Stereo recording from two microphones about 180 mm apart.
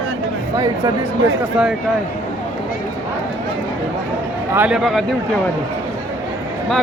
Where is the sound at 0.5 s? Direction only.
20° right (ahead or behind).